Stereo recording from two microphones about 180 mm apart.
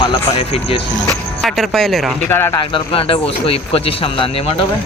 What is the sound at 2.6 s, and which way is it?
Speech, 30° left (ahead or behind).